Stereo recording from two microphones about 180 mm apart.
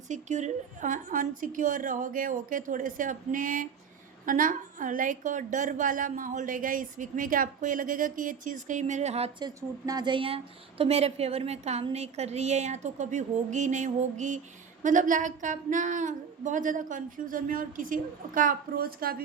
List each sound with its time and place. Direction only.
0.1 s a woman's voice: 40° right (ahead or behind)
9.4 s a woman's voice: 20° right (ahead or behind); by 19.2 s 55° right (ahead or behind)